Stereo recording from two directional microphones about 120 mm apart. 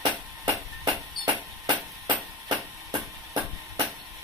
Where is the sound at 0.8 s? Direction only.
40° right (ahead or behind).